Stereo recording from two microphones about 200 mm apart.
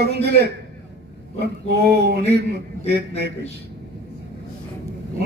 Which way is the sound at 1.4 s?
55° right (ahead or behind).